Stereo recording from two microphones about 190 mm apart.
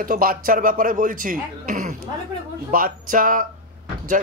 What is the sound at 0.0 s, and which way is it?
Speech, 50° right (ahead or behind).